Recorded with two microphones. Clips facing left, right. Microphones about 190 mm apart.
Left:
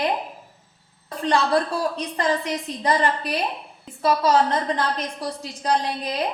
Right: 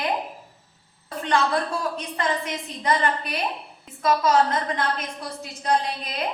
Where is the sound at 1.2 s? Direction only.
35° left (ahead or behind).